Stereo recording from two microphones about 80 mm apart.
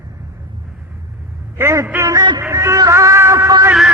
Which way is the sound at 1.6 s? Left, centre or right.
Right.